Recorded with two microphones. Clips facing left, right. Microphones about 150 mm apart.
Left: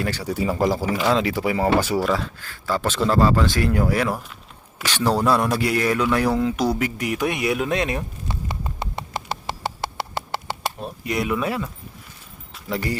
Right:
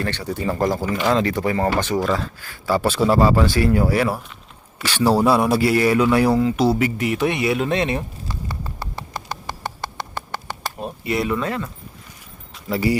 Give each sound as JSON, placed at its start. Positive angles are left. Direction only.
{"t": 0.0, "sound": "a man's voice", "side_deg": 10}
{"t": 2.4, "sound": "a man's voice", "side_deg": -10}
{"t": 8.3, "sound": "clip-clop", "side_deg": 20}
{"t": 10.8, "sound": "chop", "side_deg": 0}
{"t": 11.3, "sound": "speech", "side_deg": 10}
{"t": 12.5, "sound": "speech", "side_deg": 0}